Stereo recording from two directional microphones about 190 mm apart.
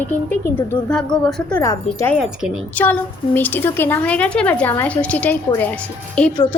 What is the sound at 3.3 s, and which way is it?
A woman's voice, 10° left (ahead or behind).